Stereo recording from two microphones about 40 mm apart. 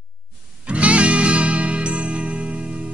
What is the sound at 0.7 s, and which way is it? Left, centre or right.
Music, right.